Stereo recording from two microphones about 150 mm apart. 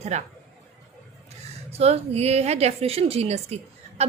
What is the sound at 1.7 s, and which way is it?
A woman's voice, 45° right (ahead or behind).